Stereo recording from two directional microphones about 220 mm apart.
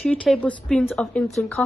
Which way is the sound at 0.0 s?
5° left (ahead or behind).